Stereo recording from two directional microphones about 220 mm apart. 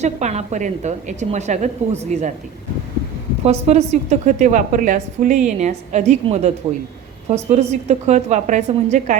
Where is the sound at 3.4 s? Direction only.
30° right (ahead or behind).